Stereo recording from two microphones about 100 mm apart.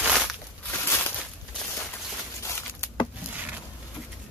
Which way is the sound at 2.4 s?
25° left (ahead or behind).